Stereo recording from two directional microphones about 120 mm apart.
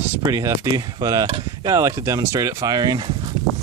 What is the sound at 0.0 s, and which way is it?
Speech, 20° right (ahead or behind).